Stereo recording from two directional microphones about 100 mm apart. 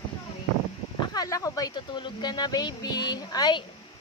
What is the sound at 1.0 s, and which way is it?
Speech, 40° left (ahead or behind).